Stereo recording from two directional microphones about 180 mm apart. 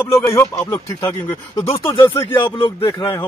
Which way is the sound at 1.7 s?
30° left (ahead or behind).